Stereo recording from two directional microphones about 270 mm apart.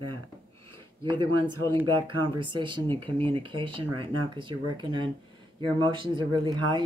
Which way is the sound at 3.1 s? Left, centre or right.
Centre.